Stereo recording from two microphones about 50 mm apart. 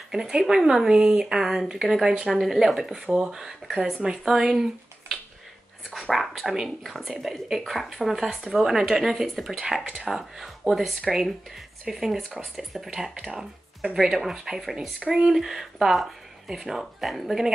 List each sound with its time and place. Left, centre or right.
0.1 s speech: centre
5.9 s a sound: centre
6.1 s speech: centre
13.3 s speech: right
13.9 s speech: centre
15.0 s speech: centre